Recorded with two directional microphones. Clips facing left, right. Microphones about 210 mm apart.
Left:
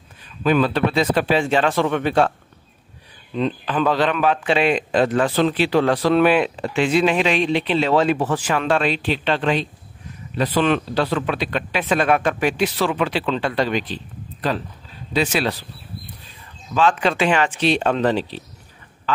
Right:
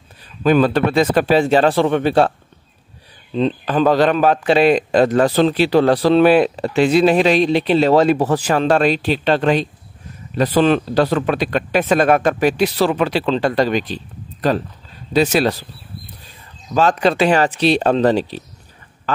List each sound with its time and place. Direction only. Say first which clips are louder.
0.4 s a man's voice: right 4 dB; 45° right (ahead or behind)
3.6 s a man's voice: right 6 dB; 40° right (ahead or behind)
16.7 s a man's voice: right 3 dB; 40° right (ahead or behind)